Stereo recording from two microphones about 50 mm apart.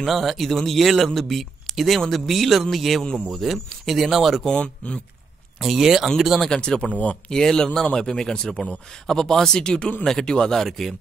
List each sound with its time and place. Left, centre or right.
0.0 s speech: centre
4.5 s speech: left
5.6 s speech: centre
6.5 s speech: centre
6.9 s speech: left
7.2 s speech: centre